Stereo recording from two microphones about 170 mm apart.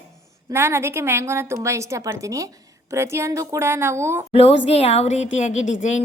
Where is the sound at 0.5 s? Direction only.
15° right (ahead or behind).